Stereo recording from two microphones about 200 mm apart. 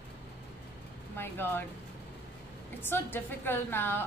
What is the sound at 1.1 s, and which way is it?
Speech, 10° left (ahead or behind).